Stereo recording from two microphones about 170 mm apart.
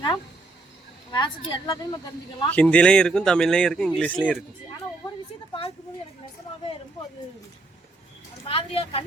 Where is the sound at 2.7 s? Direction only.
5° left (ahead or behind).